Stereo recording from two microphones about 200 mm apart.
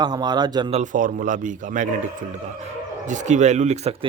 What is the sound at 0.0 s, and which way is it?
Speech, 20° right (ahead or behind).